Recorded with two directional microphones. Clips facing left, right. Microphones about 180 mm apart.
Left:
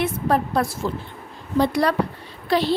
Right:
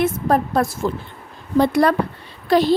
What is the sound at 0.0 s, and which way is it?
A woman's voice, 45° right (ahead or behind).